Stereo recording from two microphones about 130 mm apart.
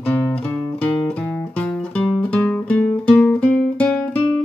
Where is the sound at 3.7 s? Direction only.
5° left (ahead or behind).